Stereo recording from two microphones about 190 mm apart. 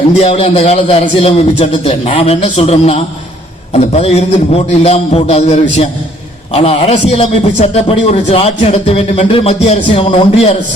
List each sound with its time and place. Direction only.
0.2 s a man's voice: 30° left (ahead or behind)